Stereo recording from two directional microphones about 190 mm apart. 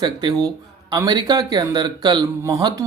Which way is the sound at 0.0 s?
25° right (ahead or behind).